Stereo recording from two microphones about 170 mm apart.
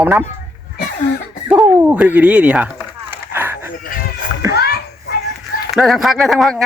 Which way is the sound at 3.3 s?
15° right (ahead or behind).